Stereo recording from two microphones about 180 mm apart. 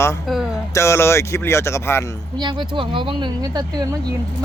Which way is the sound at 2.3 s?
25° right (ahead or behind).